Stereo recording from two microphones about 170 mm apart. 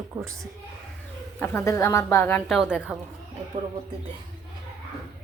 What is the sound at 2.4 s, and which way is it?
Speech, 5° right (ahead or behind).